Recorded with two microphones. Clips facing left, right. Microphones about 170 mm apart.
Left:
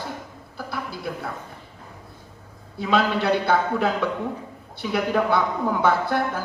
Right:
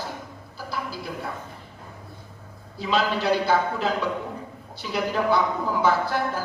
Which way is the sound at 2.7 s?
60° left (ahead or behind).